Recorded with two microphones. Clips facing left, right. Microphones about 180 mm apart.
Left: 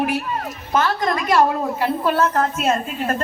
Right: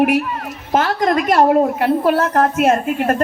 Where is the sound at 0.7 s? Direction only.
50° right (ahead or behind).